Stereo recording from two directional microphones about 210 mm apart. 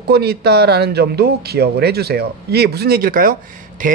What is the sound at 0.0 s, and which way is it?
Speech, 50° right (ahead or behind).